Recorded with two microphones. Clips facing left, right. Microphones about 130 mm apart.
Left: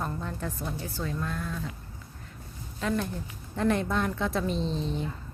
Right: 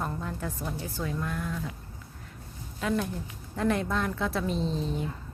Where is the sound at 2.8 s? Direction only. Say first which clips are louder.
Even; 5° right (ahead or behind).